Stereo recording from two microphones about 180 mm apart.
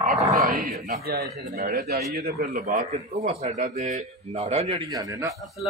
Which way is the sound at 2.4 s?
40° right (ahead or behind).